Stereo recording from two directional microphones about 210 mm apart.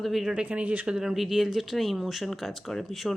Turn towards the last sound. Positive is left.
turn(degrees=0)  # may be behind; listen again after turning